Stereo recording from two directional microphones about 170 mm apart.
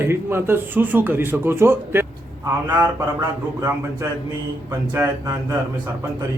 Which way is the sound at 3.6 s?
20° right (ahead or behind).